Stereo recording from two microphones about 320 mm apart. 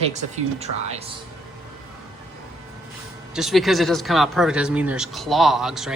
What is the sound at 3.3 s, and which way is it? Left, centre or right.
Speech, centre.